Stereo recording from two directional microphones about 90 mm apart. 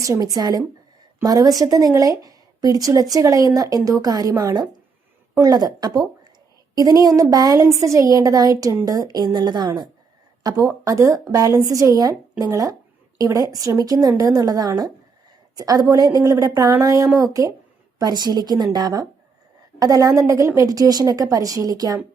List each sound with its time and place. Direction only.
0.0 s a woman's voice: 40° right (ahead or behind)
10.4 s a woman's voice: 45° right (ahead or behind)
18.0 s a woman's voice: 50° right (ahead or behind)
20.7 s a woman's voice: 45° right (ahead or behind)